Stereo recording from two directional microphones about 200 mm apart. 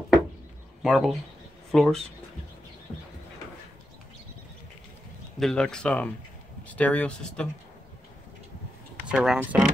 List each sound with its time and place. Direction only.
0.8 s speech: centre (ahead or behind)
5.4 s speech: 5° left (ahead or behind)
9.0 s speech: 5° right (ahead or behind)